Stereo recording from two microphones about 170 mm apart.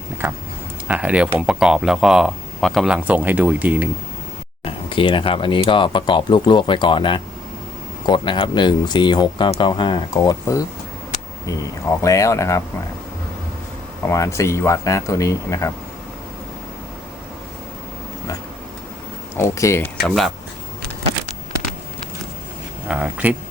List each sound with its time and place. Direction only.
0.2 s speech: 15° right (ahead or behind)
4.6 s speech: 30° left (ahead or behind)
12.0 s speech: 20° left (ahead or behind)
14.1 s speech: 20° left (ahead or behind)
19.4 s speech: 15° left (ahead or behind)
20.1 s speech: centre (ahead or behind)
22.9 s speech: 10° right (ahead or behind)